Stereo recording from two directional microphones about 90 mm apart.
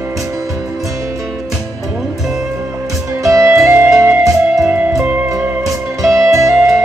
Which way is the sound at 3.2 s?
40° right (ahead or behind).